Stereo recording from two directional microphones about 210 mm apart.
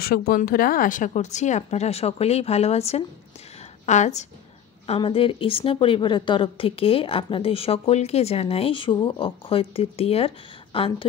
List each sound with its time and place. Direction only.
0.0 s a woman's voice: 45° left (ahead or behind); by 11.1 s 25° left (ahead or behind)